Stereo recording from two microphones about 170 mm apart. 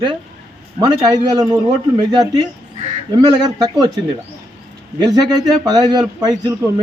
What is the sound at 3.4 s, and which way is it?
A man's voice, 25° right (ahead or behind).